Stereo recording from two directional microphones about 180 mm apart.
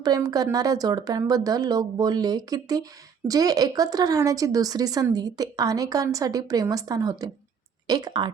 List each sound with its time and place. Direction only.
0.0 s speech: 20° right (ahead or behind)